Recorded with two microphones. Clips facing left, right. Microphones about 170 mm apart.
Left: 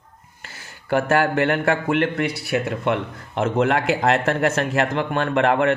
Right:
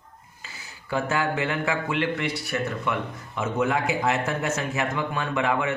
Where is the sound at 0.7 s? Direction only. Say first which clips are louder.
Left 7 dB; 70° left (ahead or behind).